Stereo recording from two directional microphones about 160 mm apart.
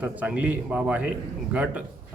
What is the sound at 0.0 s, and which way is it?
A man's voice, 10° right (ahead or behind).